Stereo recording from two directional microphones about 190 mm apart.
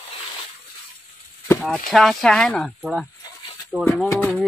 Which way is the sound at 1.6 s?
Centre (ahead or behind).